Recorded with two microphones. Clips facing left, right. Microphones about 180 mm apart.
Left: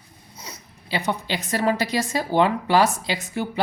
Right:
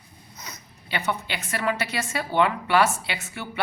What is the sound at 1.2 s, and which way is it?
Speech, 35° left (ahead or behind).